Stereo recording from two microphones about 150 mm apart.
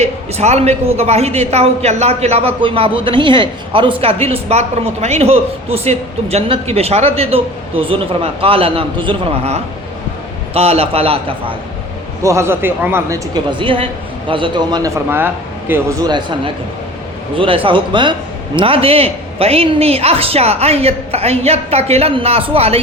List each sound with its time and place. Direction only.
0.0 s a man's voice: 45° right (ahead or behind)
12.2 s a man's voice: 20° right (ahead or behind)
13.3 s a man's voice: 35° right (ahead or behind)